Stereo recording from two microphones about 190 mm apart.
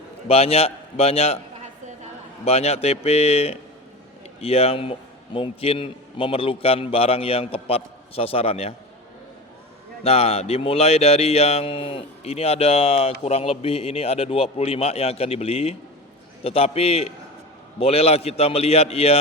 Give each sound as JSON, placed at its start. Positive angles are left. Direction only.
{"t": 0.3, "sound": "a man's voice", "side_deg": 30}
{"t": 2.4, "sound": "a man's voice", "side_deg": 35}
{"t": 10.0, "sound": "a man's voice", "side_deg": 30}